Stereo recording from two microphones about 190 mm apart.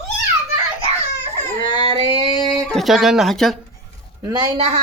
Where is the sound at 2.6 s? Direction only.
Centre (ahead or behind).